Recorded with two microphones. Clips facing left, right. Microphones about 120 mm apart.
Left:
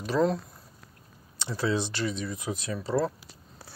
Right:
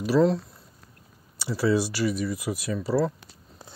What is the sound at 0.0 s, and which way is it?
Speech, 10° right (ahead or behind).